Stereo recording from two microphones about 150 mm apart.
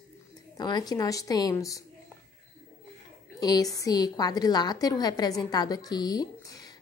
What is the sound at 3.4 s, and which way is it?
A woman's voice, 25° left (ahead or behind).